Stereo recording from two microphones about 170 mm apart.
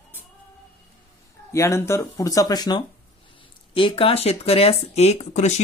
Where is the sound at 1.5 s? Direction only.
15° left (ahead or behind).